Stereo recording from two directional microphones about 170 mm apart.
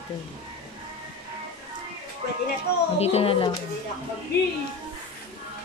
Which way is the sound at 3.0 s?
35° left (ahead or behind).